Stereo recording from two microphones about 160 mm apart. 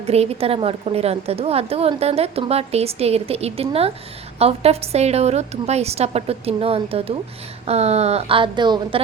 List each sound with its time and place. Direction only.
0.0 s a woman's voice: 40° right (ahead or behind)